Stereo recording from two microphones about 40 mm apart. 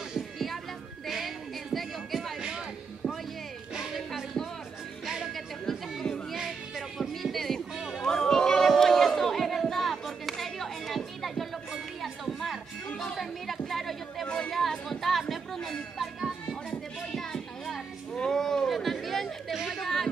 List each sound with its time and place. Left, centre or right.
1.0 s music: centre
3.9 s music: centre
5.0 s music: centre
5.3 s chatter: centre
7.0 s music: centre
7.9 s a sound: centre
12.0 s music: centre
12.9 s music: centre
13.2 s chatter: centre
14.2 s chatter: left
14.5 s music: centre
17.1 s a sound: centre
19.7 s chatter: centre